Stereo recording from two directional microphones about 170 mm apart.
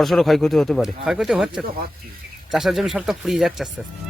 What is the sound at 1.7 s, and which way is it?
Speech, 60° right (ahead or behind).